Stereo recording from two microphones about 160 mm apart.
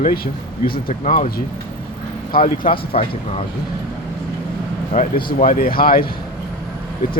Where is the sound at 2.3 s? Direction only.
60° left (ahead or behind).